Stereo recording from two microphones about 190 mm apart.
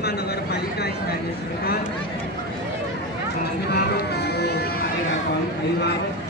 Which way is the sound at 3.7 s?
60° left (ahead or behind).